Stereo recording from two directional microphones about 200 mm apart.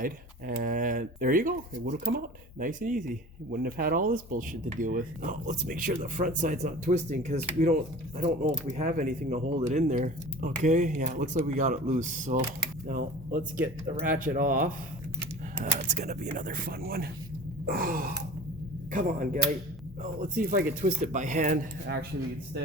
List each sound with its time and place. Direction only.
0.0 s speech: 45° right (ahead or behind)